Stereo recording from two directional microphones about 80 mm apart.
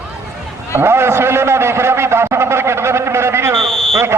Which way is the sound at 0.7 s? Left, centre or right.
Right.